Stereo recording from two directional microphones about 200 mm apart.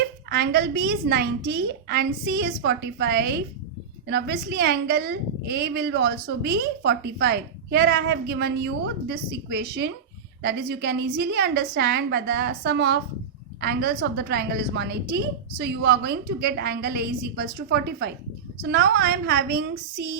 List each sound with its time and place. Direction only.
0.3 s a woman's voice: 55° right (ahead or behind)